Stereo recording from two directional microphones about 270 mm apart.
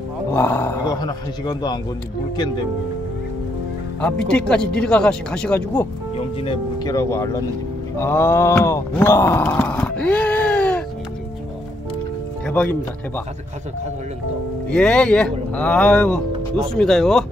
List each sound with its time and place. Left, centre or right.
0.3 s speech: centre
4.0 s speech: centre
5.8 s speech: centre
12.4 s speech: centre
14.7 s speech: centre